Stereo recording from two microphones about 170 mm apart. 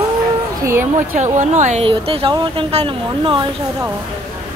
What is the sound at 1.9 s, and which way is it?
Speech, 30° right (ahead or behind).